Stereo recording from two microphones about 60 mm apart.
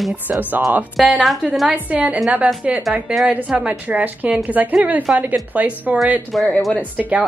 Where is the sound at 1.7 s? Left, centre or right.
Right.